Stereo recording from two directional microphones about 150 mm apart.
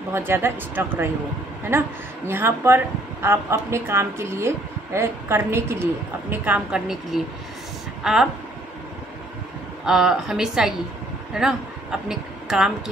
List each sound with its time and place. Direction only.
0.1 s speech: 15° right (ahead or behind)
9.8 s a woman's voice: 5° right (ahead or behind)